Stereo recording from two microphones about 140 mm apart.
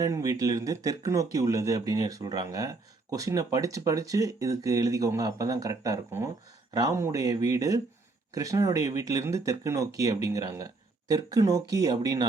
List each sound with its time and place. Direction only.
0.0 s speech: 25° right (ahead or behind)